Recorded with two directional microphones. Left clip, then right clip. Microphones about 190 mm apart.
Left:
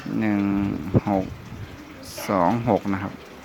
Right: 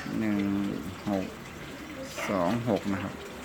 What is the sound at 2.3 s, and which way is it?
Speech, 30° left (ahead or behind).